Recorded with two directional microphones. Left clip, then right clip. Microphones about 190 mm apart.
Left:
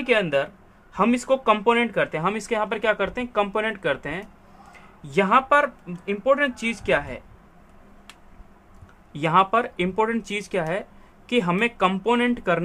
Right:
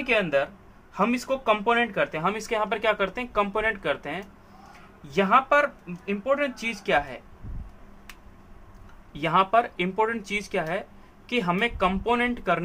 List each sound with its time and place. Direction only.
0.0 s a man's voice: 45° left (ahead or behind)
9.1 s speech: 35° left (ahead or behind)